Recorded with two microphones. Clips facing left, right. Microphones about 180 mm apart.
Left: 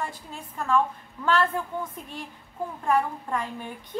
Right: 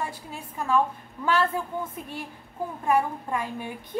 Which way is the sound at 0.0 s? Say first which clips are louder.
Right 1 dB; 10° right (ahead or behind).